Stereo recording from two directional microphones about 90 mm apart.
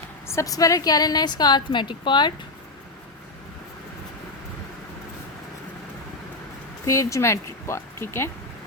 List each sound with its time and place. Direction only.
0.3 s a woman's voice: 35° left (ahead or behind); by 2.3 s 55° left (ahead or behind)
6.8 s speech: 35° left (ahead or behind)